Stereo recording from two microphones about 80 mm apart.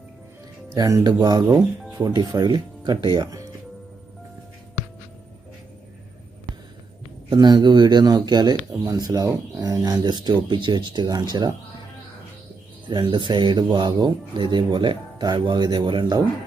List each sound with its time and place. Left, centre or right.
0.8 s speech: right
1.0 s speech: right
2.5 s speech: right
3.2 s music: right
7.3 s speech: right
8.8 s speech: right
12.9 s speech: right